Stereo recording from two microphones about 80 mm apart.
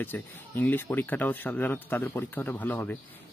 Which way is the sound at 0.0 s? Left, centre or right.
Left.